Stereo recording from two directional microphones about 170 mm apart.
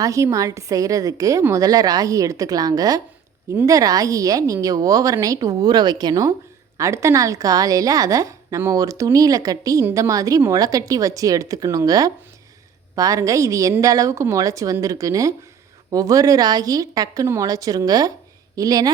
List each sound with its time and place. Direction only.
0.0 s a woman's voice: 15° right (ahead or behind)